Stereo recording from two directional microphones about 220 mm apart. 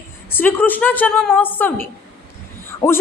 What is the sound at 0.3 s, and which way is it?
Speech, 10° left (ahead or behind).